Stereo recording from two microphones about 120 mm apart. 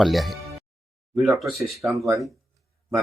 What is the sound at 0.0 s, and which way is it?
Speech, centre (ahead or behind).